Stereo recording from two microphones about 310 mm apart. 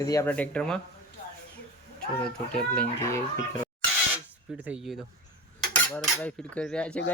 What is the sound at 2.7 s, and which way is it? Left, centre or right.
Speech, centre.